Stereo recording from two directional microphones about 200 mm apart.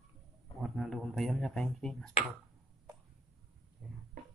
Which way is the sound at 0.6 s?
Centre (ahead or behind).